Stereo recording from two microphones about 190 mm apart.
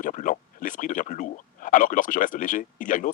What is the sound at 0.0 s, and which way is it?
Speech, 45° left (ahead or behind).